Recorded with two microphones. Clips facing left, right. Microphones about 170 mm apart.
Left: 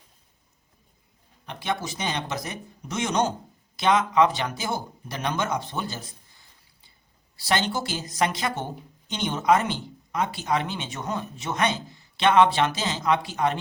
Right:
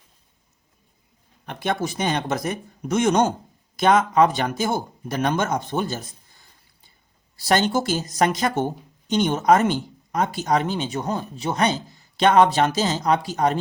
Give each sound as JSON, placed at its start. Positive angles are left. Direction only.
{"t": 1.5, "sound": "speech", "side_deg": -50}
{"t": 7.3, "sound": "speech", "side_deg": -45}